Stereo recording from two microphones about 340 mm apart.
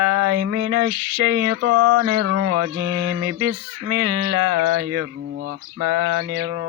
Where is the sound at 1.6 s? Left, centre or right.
Right.